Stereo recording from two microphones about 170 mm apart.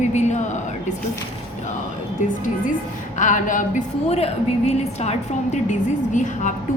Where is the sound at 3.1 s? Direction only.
50° left (ahead or behind).